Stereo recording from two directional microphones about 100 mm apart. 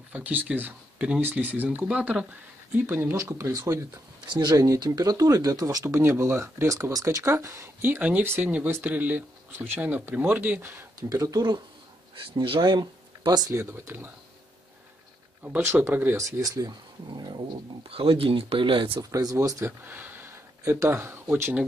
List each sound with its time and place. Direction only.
0.1 s speech: 15° right (ahead or behind)
2.7 s speech: 20° right (ahead or behind)
4.3 s speech: 45° right (ahead or behind)
5.9 s speech: 25° right (ahead or behind)
11.0 s speech: 35° right (ahead or behind)
13.6 s speech: 25° right (ahead or behind)
15.4 s speech: 20° right (ahead or behind); by 18.9 s 55° right (ahead or behind)
18.9 s speech: 35° right (ahead or behind)
19.6 s speech: 20° right (ahead or behind)